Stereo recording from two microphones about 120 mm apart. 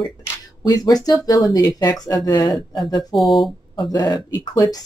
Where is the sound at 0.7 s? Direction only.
30° left (ahead or behind).